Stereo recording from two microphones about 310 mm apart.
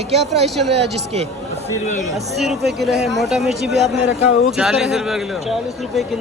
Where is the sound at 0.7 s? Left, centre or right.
Centre.